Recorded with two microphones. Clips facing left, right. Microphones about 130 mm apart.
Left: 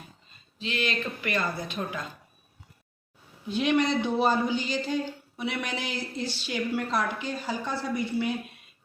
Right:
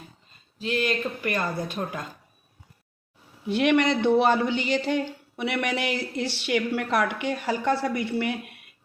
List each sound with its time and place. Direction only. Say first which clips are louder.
0.6 s speech: right 4 dB; 45° right (ahead or behind)
1.8 s speech: left 1 dB; 30° right (ahead or behind)
3.4 s speech: right 3 dB; 70° right (ahead or behind)